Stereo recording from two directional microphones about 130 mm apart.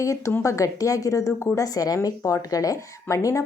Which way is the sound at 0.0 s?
25° left (ahead or behind).